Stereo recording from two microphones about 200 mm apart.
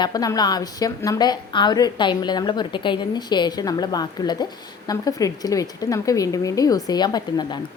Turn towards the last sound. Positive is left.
turn(degrees=20)  # may be behind; listen again after turning